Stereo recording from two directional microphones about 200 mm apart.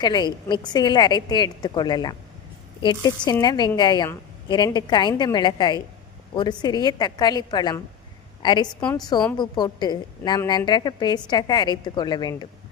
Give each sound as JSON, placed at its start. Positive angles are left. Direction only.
{"t": 0.0, "sound": "a woman's voice", "side_deg": 20}